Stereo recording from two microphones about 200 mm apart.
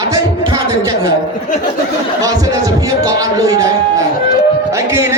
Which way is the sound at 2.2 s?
20° right (ahead or behind).